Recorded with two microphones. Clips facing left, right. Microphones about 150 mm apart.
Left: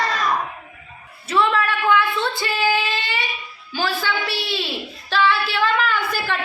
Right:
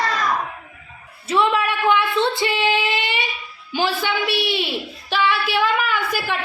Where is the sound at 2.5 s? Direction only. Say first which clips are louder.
Right 1 dB; 25° right (ahead or behind).